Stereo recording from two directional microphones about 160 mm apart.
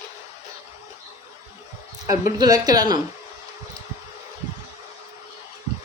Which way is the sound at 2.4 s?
25° right (ahead or behind).